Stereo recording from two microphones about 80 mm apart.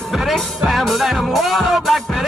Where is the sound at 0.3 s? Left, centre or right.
Centre.